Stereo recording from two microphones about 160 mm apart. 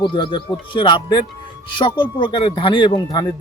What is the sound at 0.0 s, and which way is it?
Speech, 30° left (ahead or behind).